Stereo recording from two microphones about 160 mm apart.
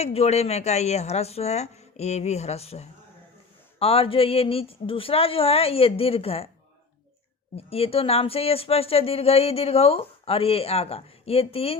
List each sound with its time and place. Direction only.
0.0 s a woman's voice: 40° left (ahead or behind)
7.5 s speech: 35° left (ahead or behind)